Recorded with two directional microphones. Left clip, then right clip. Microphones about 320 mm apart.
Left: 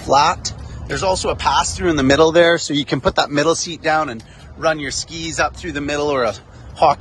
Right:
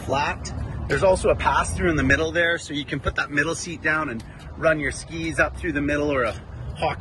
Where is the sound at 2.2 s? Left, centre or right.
Left.